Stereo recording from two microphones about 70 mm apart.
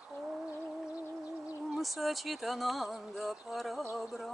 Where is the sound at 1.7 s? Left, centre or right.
Centre.